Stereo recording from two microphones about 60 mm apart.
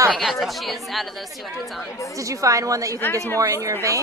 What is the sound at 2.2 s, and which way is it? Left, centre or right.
A woman's voice, right.